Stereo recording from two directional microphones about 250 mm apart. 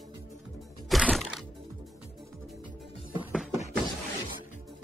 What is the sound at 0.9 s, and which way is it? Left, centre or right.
Music, centre.